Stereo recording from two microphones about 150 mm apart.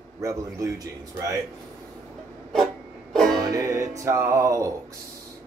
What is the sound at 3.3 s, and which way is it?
Music, 25° right (ahead or behind).